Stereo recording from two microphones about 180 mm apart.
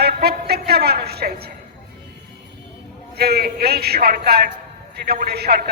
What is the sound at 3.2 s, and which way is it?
A man's voice, 60° right (ahead or behind).